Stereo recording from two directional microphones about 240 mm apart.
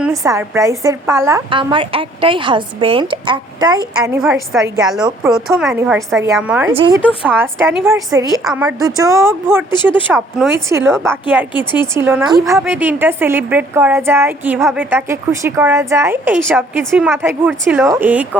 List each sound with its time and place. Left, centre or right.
0.0 s a woman's voice: centre
4.2 s a woman's voice: centre
5.0 s a woman's voice: centre
5.5 s a woman's voice: centre
6.7 s a woman's voice: centre